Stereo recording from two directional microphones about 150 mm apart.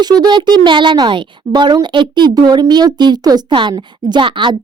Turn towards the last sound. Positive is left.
turn(degrees=-35)  # may be behind; listen again after turning